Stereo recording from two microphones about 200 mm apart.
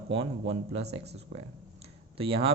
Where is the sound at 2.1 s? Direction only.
25° right (ahead or behind).